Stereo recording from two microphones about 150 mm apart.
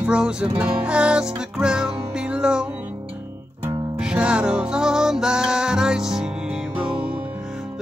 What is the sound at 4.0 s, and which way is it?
Music, 5° right (ahead or behind).